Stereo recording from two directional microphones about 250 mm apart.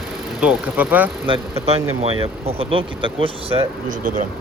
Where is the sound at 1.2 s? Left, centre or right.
Centre.